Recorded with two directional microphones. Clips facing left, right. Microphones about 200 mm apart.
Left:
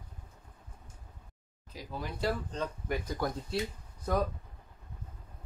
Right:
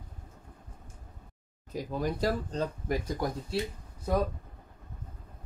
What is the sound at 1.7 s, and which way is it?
Speech, 45° right (ahead or behind).